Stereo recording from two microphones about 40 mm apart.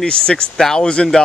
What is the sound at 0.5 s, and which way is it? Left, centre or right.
Speech, centre.